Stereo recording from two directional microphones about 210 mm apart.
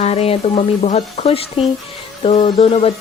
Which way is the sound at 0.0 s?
30° left (ahead or behind).